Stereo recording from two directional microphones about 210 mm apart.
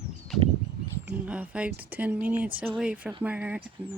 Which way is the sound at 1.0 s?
5° right (ahead or behind).